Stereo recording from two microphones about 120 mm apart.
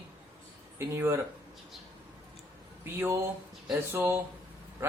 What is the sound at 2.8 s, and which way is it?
Speech, 20° right (ahead or behind).